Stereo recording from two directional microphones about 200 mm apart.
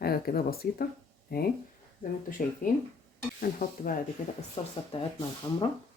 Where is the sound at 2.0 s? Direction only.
45° left (ahead or behind).